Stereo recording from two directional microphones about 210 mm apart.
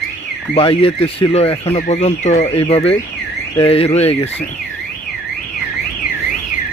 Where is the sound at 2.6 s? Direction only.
25° left (ahead or behind).